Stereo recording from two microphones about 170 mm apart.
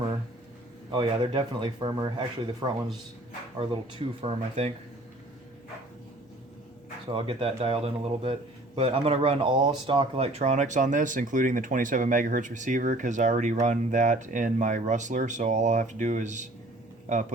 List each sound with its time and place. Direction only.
0.9 s speech: 30° right (ahead or behind)
7.1 s a man's voice: 35° right (ahead or behind)